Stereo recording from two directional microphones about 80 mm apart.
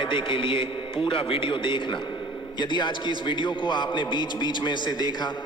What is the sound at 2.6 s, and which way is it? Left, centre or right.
Speech, left.